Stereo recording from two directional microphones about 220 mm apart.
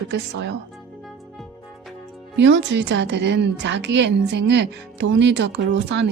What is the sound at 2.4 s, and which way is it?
A woman's voice, 55° right (ahead or behind).